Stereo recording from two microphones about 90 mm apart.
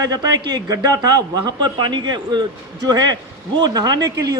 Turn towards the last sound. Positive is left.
turn(degrees=-50)  # may be behind; listen again after turning